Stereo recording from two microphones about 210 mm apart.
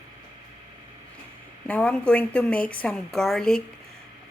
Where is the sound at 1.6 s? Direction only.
5° left (ahead or behind).